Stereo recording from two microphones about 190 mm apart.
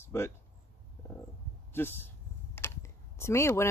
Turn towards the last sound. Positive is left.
turn(degrees=15)  # may be behind; listen again after turning